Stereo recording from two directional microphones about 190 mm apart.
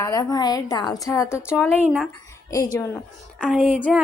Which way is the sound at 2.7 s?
10° left (ahead or behind).